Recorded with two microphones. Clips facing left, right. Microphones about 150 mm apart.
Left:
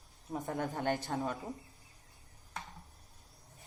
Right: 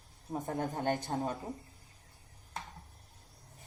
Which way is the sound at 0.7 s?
20° right (ahead or behind).